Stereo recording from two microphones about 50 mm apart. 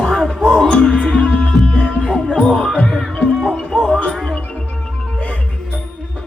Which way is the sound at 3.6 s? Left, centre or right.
Centre.